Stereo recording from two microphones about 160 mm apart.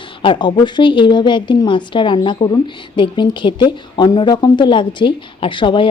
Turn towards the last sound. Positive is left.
turn(degrees=30)  # may be behind; listen again after turning